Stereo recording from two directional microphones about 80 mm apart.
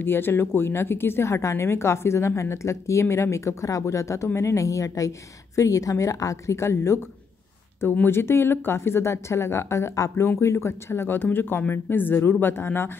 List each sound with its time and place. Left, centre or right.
0.0 s a woman's voice: left